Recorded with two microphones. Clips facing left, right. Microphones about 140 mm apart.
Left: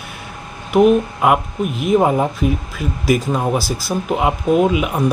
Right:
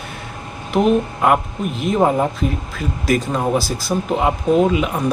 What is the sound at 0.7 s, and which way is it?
Speech, 10° left (ahead or behind).